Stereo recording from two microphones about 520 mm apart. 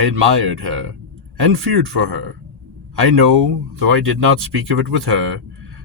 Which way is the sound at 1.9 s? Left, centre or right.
Right.